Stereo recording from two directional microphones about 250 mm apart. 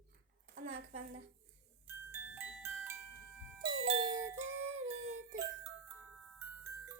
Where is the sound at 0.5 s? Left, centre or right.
Right.